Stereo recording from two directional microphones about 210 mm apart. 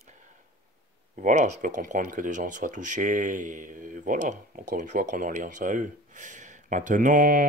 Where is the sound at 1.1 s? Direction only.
35° right (ahead or behind).